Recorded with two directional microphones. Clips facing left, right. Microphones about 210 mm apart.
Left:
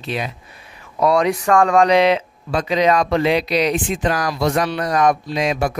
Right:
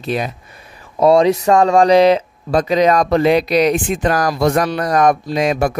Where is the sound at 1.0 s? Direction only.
30° right (ahead or behind).